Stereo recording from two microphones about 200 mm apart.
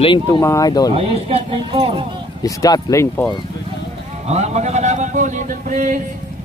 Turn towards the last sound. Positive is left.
turn(degrees=-40)  # may be behind; listen again after turning